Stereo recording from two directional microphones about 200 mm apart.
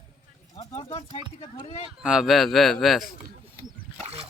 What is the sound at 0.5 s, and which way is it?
Speech, 30° left (ahead or behind).